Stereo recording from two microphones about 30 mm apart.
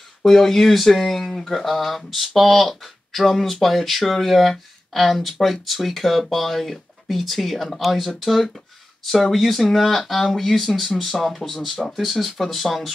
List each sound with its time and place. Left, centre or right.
0.3 s speech: centre